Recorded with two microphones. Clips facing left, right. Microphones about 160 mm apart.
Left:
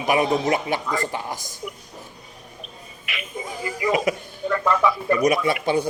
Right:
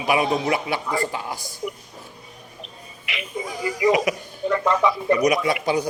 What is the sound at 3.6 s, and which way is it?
A man's voice, 20° right (ahead or behind).